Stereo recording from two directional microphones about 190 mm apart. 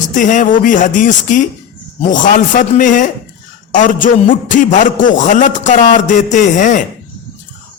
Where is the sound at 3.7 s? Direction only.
45° left (ahead or behind).